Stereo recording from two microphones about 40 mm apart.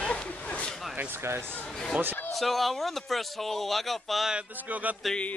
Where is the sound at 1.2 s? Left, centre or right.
Right.